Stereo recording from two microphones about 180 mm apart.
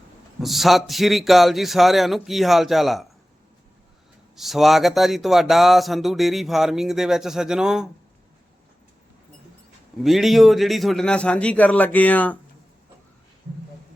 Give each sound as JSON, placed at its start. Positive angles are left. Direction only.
{"t": 0.4, "sound": "speech", "side_deg": 0}
{"t": 4.4, "sound": "speech", "side_deg": 0}
{"t": 10.0, "sound": "speech", "side_deg": 0}